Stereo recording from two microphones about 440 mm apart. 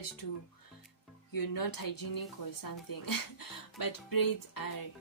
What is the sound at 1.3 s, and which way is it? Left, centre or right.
Speech, left.